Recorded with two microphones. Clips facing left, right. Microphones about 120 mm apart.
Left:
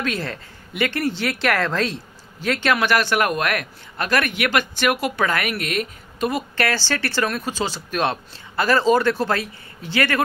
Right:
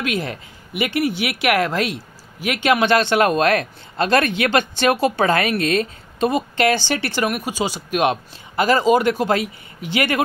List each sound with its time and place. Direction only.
0.0 s a man's voice: 15° right (ahead or behind)